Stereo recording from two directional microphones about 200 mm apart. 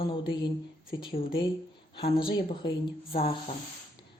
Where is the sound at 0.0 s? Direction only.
25° left (ahead or behind).